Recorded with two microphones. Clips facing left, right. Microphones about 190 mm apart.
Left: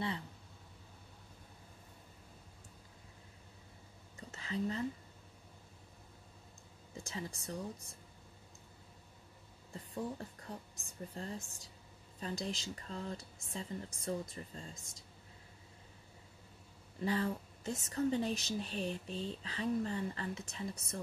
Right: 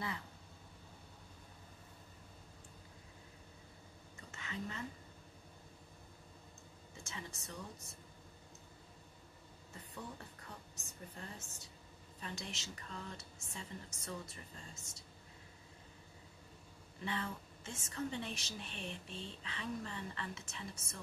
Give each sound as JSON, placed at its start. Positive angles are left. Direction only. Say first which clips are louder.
{"t": 4.2, "sound": "a sound", "louder": "left 7 dB", "side_deg": 35}
{"t": 7.0, "sound": "a woman's voice", "louder": "left 6 dB", "side_deg": 35}
{"t": 9.9, "sound": "a woman's voice", "louder": "left 9 dB", "side_deg": 35}
{"t": 17.0, "sound": "a woman's voice", "louder": "left 7 dB", "side_deg": 40}